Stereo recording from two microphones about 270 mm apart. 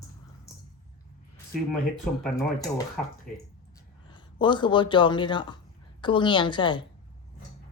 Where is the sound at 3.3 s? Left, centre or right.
Centre.